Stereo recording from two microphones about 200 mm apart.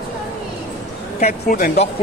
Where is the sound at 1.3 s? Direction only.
50° left (ahead or behind).